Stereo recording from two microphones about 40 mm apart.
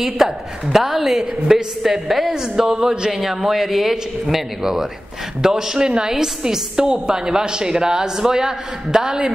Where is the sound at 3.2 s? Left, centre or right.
Centre.